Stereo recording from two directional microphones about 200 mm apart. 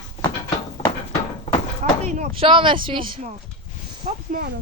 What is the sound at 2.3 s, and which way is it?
Speech, 25° right (ahead or behind).